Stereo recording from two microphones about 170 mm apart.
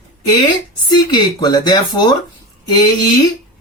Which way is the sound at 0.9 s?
25° left (ahead or behind).